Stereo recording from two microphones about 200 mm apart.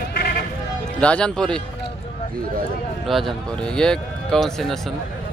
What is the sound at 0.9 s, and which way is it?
Speech, 5° left (ahead or behind).